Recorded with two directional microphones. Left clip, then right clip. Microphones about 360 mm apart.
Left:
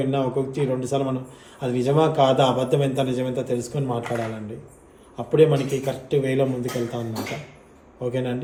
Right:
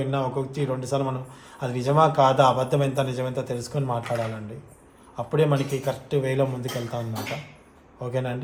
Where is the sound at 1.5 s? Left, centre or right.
Centre.